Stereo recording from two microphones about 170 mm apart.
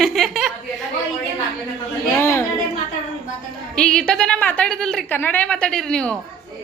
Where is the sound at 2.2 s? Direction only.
15° left (ahead or behind).